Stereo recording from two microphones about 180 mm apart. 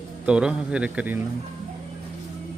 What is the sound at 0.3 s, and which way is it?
Speech, 5° right (ahead or behind).